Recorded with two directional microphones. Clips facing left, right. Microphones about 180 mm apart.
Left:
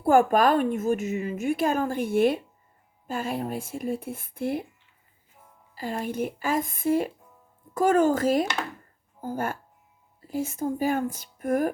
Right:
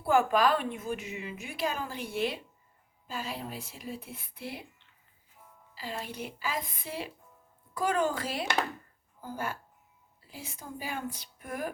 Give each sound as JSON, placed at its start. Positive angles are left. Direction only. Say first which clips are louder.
{"t": 0.0, "sound": "a woman's voice", "louder": "left 6 dB", "side_deg": 50}
{"t": 5.7, "sound": "a woman's voice", "louder": "left 9 dB", "side_deg": 50}